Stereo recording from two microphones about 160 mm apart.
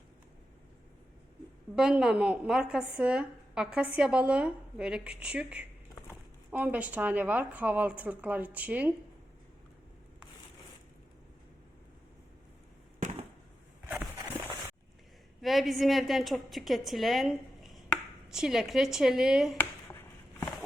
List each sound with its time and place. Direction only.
1.7 s a woman's voice: 5° right (ahead or behind)
13.0 s a sound: 45° right (ahead or behind)
15.4 s a woman's voice: centre (ahead or behind)